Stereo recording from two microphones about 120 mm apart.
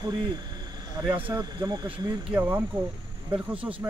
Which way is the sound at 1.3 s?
35° right (ahead or behind).